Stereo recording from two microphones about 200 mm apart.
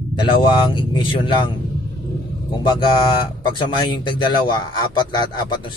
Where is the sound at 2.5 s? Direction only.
20° left (ahead or behind).